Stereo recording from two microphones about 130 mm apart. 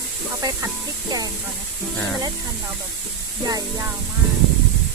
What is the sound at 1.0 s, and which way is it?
Speech, 30° right (ahead or behind).